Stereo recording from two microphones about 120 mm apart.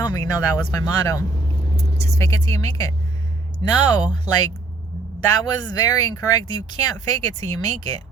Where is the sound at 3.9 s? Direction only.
35° left (ahead or behind).